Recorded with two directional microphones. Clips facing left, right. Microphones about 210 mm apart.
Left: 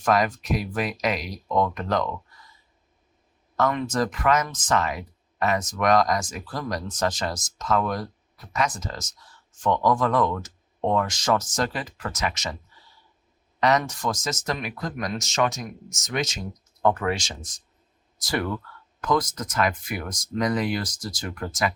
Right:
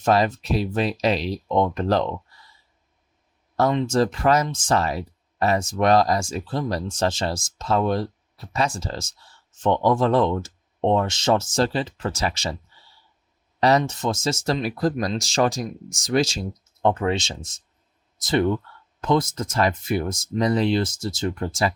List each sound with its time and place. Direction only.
0.0 s speech: 25° right (ahead or behind)
3.6 s speech: 25° right (ahead or behind)
13.6 s speech: 30° right (ahead or behind)